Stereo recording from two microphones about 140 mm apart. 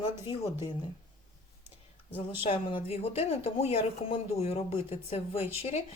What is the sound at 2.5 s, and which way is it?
Speech, 40° left (ahead or behind).